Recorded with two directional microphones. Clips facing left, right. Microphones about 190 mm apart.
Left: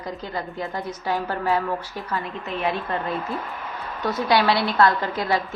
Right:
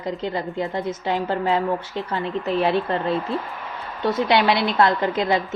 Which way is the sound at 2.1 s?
35° right (ahead or behind).